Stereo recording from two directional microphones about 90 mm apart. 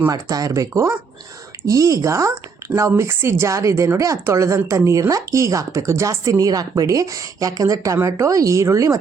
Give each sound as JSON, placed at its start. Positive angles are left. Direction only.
{"t": 0.1, "sound": "speech", "side_deg": -40}
{"t": 7.9, "sound": "speech", "side_deg": -30}